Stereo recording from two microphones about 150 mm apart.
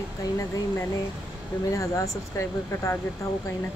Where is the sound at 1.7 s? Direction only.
20° left (ahead or behind).